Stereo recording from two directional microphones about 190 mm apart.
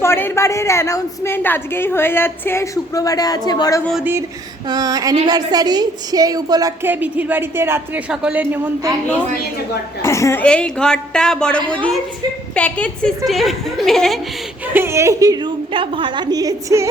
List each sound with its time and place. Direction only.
0.0 s a woman's voice: 10° left (ahead or behind)
4.7 s a woman's voice: 20° right (ahead or behind)
10.0 s a woman's voice: 15° left (ahead or behind)
14.7 s a woman's voice: 10° right (ahead or behind)